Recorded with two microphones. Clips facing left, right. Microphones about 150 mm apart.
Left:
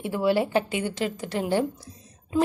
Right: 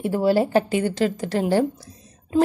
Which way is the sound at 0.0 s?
40° right (ahead or behind).